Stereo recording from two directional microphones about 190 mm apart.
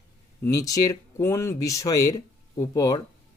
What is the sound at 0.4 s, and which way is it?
Speech, 20° left (ahead or behind).